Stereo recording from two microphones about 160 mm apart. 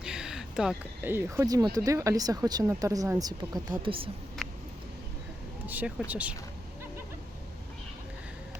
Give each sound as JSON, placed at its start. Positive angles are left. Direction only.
{"t": 0.0, "sound": "a sound", "side_deg": -5}
{"t": 1.1, "sound": "speech", "side_deg": -15}
{"t": 5.6, "sound": "speech", "side_deg": -10}